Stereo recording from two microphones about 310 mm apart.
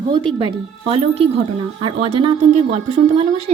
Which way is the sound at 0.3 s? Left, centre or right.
Centre.